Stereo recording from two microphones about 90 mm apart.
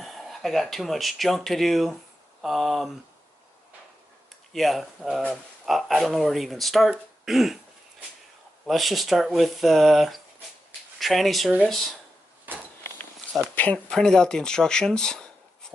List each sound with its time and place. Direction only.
0.0 s speech: centre (ahead or behind)
4.5 s speech: centre (ahead or behind)
8.6 s speech: centre (ahead or behind)
12.5 s a sound: 20° right (ahead or behind)
13.6 s speech: 10° left (ahead or behind)